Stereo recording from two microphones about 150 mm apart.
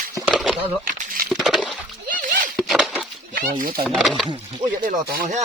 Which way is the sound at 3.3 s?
70° right (ahead or behind).